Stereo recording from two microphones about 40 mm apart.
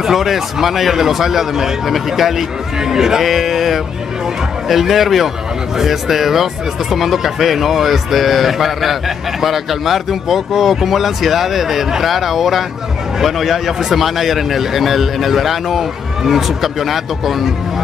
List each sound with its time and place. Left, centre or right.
0.0 s a man's voice: centre